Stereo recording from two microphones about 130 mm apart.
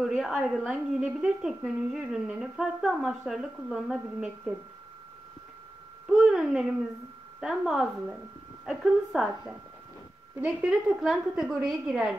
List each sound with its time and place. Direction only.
0.0 s a woman's voice: centre (ahead or behind)
6.0 s a woman's voice: 5° right (ahead or behind)
10.4 s a woman's voice: 10° right (ahead or behind)